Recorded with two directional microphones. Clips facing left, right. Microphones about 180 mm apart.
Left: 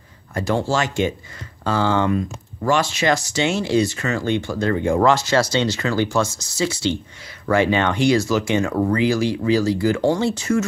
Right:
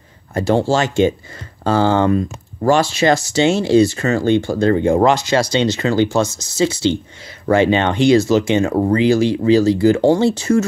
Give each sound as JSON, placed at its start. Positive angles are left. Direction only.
{"t": 0.3, "sound": "speech", "side_deg": -25}